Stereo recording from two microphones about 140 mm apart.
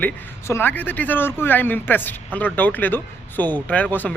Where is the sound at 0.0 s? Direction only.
15° left (ahead or behind).